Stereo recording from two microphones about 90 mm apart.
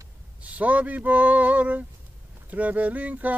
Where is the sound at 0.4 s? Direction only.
15° right (ahead or behind).